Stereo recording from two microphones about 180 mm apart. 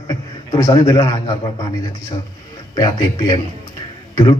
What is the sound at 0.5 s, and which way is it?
Speech, 20° left (ahead or behind).